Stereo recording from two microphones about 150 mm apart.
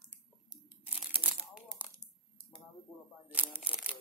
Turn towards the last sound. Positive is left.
turn(degrees=-10)  # may be behind; listen again after turning